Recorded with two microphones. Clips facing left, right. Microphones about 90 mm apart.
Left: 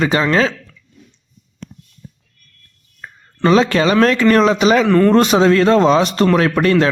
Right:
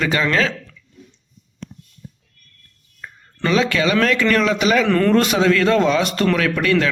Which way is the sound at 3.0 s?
35° left (ahead or behind).